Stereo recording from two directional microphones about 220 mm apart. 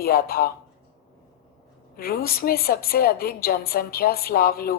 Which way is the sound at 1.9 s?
45° left (ahead or behind).